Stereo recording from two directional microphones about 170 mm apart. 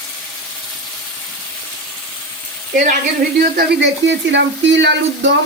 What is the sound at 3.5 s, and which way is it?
Speech, 80° right.